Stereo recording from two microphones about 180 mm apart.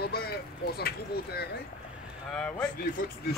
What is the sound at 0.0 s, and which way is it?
Speech, 60° left (ahead or behind).